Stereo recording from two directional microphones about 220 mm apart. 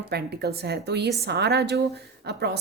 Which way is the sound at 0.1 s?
45° right (ahead or behind).